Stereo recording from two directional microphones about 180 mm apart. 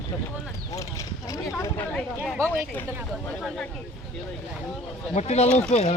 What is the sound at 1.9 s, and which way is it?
Speech, 5° left (ahead or behind).